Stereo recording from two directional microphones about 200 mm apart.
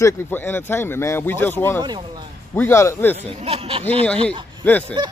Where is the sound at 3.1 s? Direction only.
30° right (ahead or behind).